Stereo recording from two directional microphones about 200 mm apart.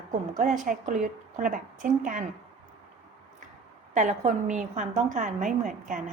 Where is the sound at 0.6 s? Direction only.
40° right (ahead or behind).